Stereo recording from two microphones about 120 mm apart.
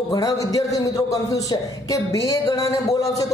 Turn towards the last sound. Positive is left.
turn(degrees=30)  # may be behind; listen again after turning